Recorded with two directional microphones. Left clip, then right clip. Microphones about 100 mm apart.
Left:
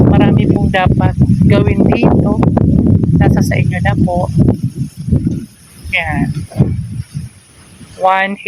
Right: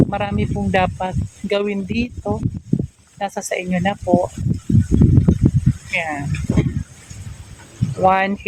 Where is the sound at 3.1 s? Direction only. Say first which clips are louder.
Left 2 dB; 10° right (ahead or behind).